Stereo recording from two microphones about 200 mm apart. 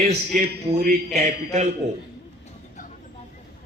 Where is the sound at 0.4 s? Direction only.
55° right (ahead or behind).